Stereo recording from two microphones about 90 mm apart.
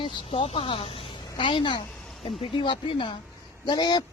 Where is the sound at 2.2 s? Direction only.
80° left.